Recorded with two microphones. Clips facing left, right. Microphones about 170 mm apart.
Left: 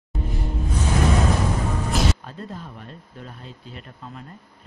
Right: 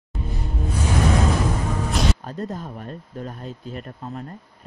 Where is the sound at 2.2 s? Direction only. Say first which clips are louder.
Right 6 dB; 45° right (ahead or behind).